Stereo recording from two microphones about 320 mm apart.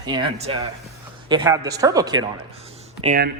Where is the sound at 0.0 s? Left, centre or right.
Centre.